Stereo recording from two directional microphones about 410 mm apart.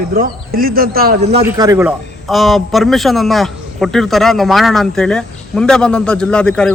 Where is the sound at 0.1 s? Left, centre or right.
Right.